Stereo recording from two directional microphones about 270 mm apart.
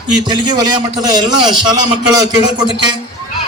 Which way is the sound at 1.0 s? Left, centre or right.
Centre.